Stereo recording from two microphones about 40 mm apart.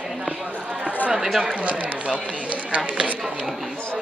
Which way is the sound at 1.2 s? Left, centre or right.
Centre.